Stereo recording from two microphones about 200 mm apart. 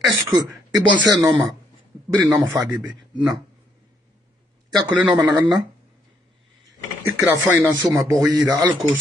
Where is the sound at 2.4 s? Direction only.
15° right (ahead or behind).